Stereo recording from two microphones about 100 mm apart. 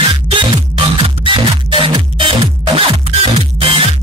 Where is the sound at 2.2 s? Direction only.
60° right (ahead or behind).